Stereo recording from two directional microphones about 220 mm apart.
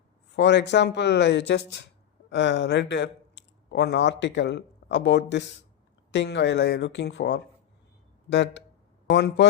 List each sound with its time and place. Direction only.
0.3 s speech: 50° left (ahead or behind)